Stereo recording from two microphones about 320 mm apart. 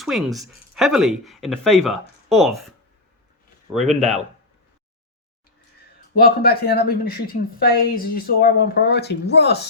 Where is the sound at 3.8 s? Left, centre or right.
Right.